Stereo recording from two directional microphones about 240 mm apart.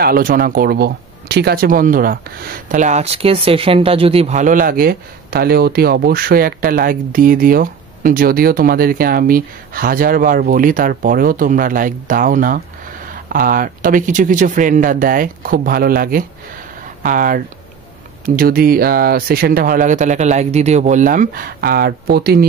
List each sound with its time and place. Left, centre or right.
0.0 s speech: right